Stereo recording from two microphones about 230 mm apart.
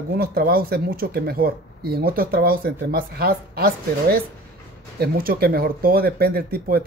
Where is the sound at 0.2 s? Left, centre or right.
Right.